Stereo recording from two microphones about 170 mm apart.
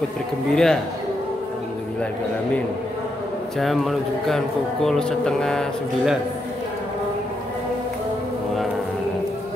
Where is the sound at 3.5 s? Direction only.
Centre (ahead or behind).